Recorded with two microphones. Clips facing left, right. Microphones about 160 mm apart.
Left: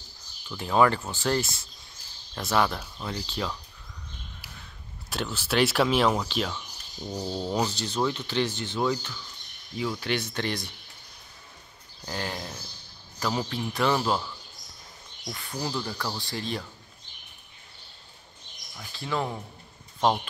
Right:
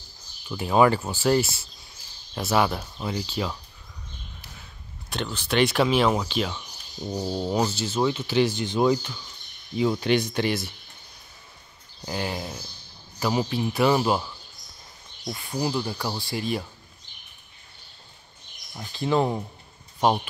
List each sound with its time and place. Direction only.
0.5 s speech: 10° right (ahead or behind)
5.1 s speech: 5° left (ahead or behind)
12.1 s speech: 10° right (ahead or behind)
15.3 s speech: 15° right (ahead or behind)
18.9 s speech: 25° right (ahead or behind)